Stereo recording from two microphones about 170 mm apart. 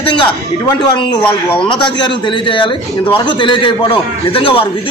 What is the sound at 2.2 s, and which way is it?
A man's voice, 30° left (ahead or behind).